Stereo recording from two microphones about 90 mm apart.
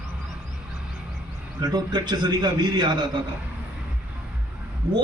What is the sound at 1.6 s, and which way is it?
A man's voice, 50° right (ahead or behind).